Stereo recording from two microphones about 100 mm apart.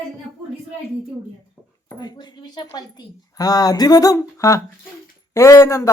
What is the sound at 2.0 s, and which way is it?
A woman's voice, 45° left (ahead or behind).